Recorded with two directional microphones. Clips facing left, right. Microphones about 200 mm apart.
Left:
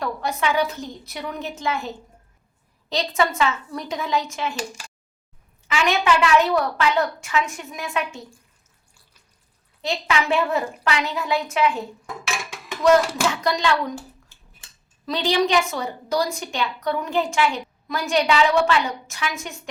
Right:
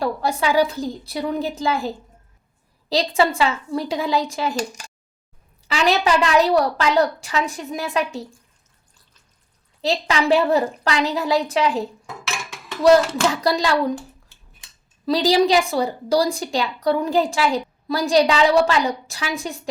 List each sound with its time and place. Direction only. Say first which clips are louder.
0.0 s a woman's voice: right 3 dB; 30° right (ahead or behind)
2.9 s a woman's voice: right 4 dB; 30° right (ahead or behind)
9.8 s a woman's voice: right 3 dB; 35° right (ahead or behind)
13.3 s a woman's voice: right 2 dB; 35° right (ahead or behind)
15.0 s a woman's voice: right 5 dB; 35° right (ahead or behind)